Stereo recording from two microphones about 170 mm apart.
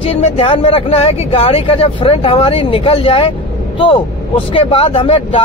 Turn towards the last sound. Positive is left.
turn(degrees=35)  # may be behind; listen again after turning